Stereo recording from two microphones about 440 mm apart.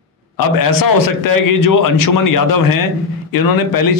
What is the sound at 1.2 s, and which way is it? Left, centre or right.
A man's voice, left.